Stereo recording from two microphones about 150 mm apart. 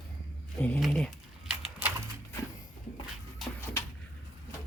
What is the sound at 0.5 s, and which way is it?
Speech, 10° left (ahead or behind).